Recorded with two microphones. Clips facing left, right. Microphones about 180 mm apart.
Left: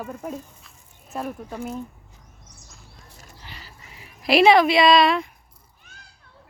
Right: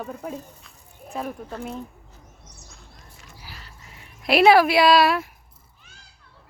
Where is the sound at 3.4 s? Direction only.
Centre (ahead or behind).